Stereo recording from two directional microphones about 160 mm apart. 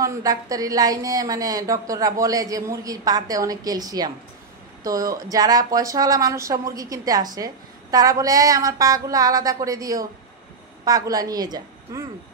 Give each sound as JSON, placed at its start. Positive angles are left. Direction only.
{"t": 0.0, "sound": "speech", "side_deg": -20}